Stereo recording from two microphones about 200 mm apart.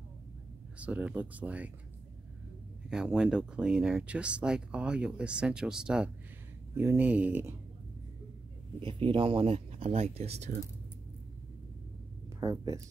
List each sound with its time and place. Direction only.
0.7 s speech: 5° right (ahead or behind)
2.9 s speech: 5° right (ahead or behind)
8.8 s speech: 25° right (ahead or behind)
12.4 s speech: 15° right (ahead or behind)